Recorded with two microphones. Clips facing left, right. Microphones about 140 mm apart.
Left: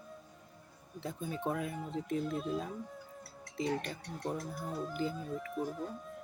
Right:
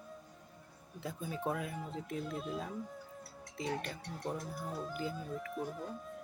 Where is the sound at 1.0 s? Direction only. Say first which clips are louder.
Left 1 dB; 5° right (ahead or behind).